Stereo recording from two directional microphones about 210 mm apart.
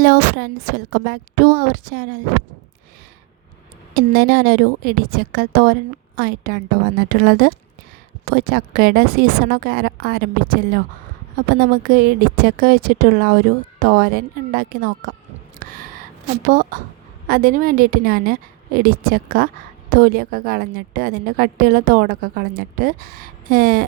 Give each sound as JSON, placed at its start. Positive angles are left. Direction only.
{"t": 0.0, "sound": "a woman's voice", "side_deg": -40}
{"t": 3.9, "sound": "a woman's voice", "side_deg": -45}
{"t": 16.5, "sound": "a woman's voice", "side_deg": -40}